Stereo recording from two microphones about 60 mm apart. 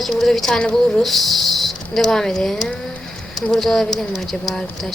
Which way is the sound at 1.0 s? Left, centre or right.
Centre.